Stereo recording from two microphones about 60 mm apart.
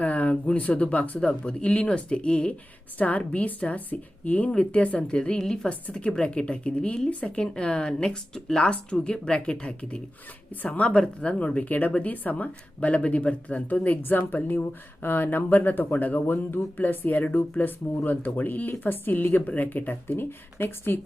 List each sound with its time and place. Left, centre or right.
0.0 s speech: left